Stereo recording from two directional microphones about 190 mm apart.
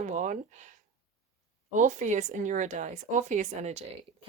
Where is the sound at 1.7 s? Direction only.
40° right (ahead or behind).